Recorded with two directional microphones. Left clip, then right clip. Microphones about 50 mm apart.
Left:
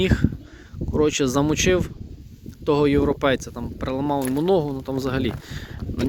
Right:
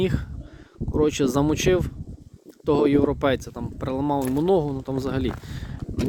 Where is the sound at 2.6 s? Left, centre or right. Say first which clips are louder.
Left 1 dB; right.